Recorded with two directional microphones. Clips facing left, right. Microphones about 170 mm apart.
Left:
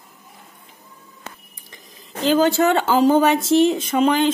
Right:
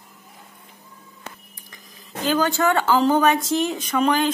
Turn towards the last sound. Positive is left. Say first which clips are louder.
# left 3 dB
turn(degrees=25)  # may be behind; listen again after turning